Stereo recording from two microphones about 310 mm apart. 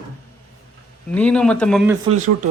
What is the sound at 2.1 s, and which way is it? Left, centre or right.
Speech, right.